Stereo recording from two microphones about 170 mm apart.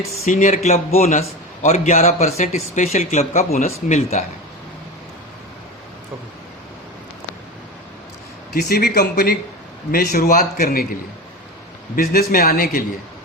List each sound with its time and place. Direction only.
0.3 s a man's voice: 45° left (ahead or behind)
8.5 s a man's voice: 65° left (ahead or behind)
11.9 s a man's voice: 60° left (ahead or behind)